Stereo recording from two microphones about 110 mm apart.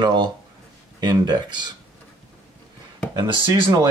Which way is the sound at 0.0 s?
40° right (ahead or behind).